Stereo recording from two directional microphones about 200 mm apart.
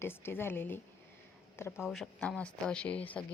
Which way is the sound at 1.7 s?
Centre (ahead or behind).